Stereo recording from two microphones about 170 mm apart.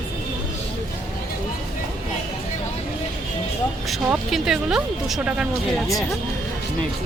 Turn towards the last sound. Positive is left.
turn(degrees=-5)  # may be behind; listen again after turning